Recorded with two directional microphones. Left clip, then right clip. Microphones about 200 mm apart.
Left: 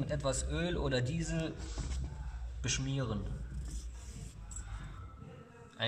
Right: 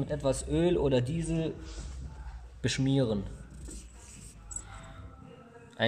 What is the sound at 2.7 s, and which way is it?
Speech, 25° right (ahead or behind).